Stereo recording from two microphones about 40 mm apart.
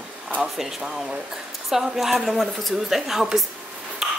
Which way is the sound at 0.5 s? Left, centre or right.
Centre.